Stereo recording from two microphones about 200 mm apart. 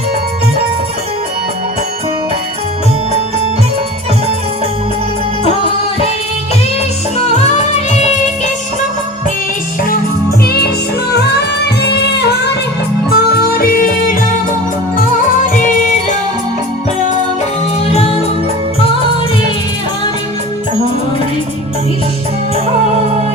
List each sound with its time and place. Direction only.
7.3 s music: 35° left (ahead or behind)
10.4 s music: 50° left (ahead or behind)
15.5 s music: 40° left (ahead or behind)
17.8 s music: 30° left (ahead or behind)